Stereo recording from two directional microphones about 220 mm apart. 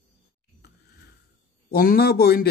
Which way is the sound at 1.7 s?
45° left (ahead or behind).